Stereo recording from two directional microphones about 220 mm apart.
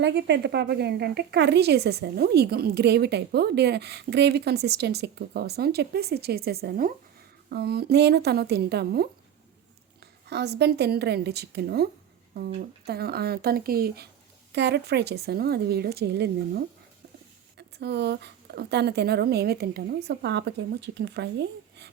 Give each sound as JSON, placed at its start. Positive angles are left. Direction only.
{"t": 0.0, "sound": "a woman's voice", "side_deg": -50}
{"t": 17.6, "sound": "a woman's voice", "side_deg": -50}